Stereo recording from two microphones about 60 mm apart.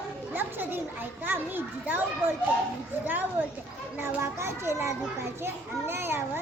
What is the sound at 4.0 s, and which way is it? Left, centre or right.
A child's voice, right.